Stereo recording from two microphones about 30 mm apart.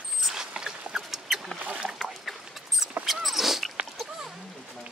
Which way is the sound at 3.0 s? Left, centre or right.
Centre.